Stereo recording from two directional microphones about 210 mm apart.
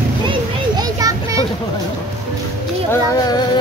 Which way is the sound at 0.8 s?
15° right (ahead or behind).